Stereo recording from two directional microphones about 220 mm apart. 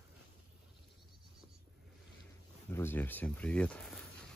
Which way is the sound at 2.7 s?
10° left (ahead or behind).